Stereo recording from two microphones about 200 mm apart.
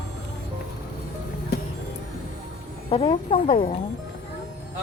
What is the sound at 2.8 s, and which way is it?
Speech, 25° left (ahead or behind).